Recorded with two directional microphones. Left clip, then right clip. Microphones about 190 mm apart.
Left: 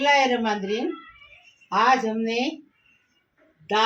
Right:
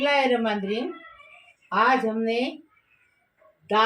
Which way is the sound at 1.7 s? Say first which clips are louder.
Left 1 dB; 15° left (ahead or behind).